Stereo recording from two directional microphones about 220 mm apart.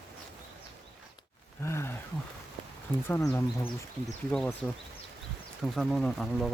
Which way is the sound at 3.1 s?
15° left (ahead or behind).